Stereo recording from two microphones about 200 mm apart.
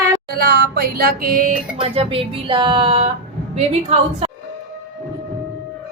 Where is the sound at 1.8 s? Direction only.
30° right (ahead or behind).